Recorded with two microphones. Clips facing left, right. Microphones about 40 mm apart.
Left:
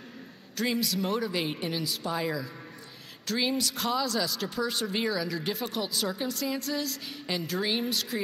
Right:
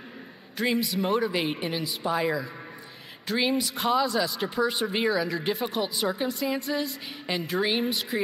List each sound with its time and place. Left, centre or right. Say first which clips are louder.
0.6 s speech: right 3 dB; right